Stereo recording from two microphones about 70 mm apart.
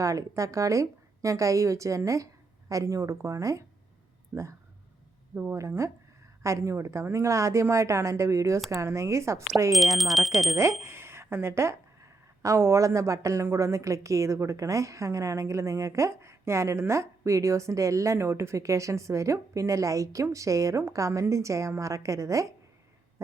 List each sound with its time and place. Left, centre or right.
0.0 s speech: right
4.3 s speech: centre
5.3 s speech: right
5.5 s speech: right
9.7 s speech: centre
10.6 s speech: right